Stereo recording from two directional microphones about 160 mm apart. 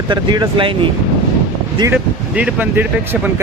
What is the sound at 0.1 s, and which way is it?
Speech, 30° right (ahead or behind).